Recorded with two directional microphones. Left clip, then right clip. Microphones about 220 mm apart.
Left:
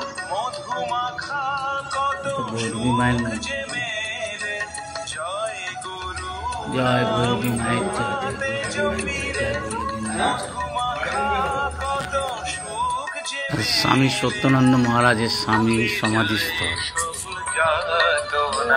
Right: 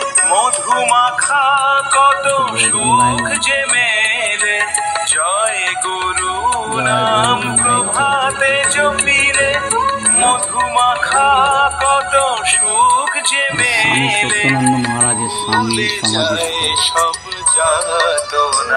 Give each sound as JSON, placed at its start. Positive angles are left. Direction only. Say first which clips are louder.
{"t": 0.3, "sound": "music", "louder": "right 12 dB", "side_deg": -45}
{"t": 6.4, "sound": "music", "louder": "right 5 dB", "side_deg": -45}
{"t": 16.8, "sound": "music", "louder": "right 12 dB", "side_deg": -45}